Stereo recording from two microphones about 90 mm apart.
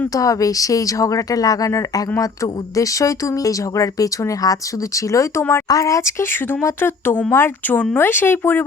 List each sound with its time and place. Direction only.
0.2 s speech: 40° left (ahead or behind)
5.1 s speech: 25° left (ahead or behind)
5.6 s speech: 40° left (ahead or behind); by 8.6 s 25° left (ahead or behind)